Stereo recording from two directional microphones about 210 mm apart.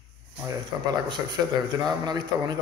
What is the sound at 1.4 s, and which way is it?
A man's voice, 15° right (ahead or behind).